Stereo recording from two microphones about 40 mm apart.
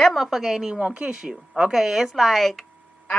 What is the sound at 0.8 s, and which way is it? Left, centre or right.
Speech, right.